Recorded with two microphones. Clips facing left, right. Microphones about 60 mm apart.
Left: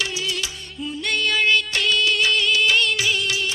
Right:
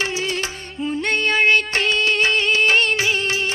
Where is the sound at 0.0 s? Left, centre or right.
Right.